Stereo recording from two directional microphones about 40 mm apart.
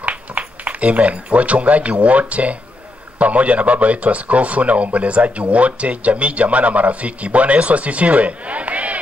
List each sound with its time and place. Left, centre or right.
0.0 s a man's voice: right